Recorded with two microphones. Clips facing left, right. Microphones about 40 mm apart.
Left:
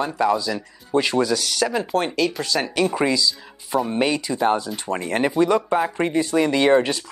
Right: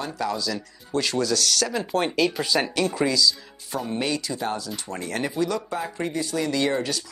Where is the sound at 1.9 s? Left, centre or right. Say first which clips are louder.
Right 3 dB; centre.